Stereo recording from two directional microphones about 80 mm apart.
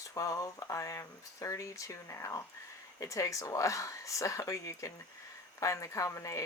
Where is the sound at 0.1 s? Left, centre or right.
Left.